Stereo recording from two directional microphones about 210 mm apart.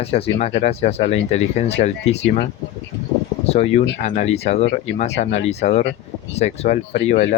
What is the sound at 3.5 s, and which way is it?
Speech, 30° left (ahead or behind).